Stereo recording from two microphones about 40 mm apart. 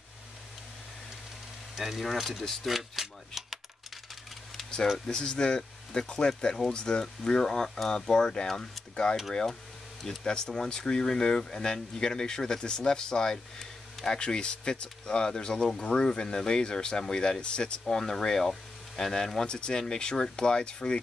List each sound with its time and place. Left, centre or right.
1.8 s speech: centre
2.6 s a sound: centre
4.9 s speech: centre